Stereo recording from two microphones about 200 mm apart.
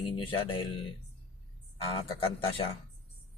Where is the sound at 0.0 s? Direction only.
25° left (ahead or behind).